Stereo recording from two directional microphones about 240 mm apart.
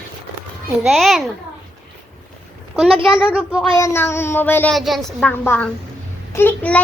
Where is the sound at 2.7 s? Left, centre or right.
Centre.